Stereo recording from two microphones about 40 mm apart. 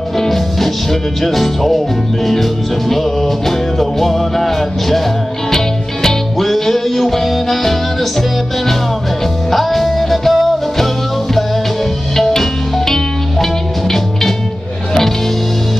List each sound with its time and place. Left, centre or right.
0.2 s music: centre
2.9 s music: centre
6.0 s music: centre
9.5 s music: centre
12.2 s music: centre